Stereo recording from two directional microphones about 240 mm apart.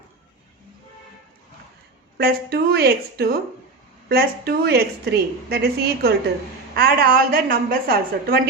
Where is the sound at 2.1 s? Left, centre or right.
Right.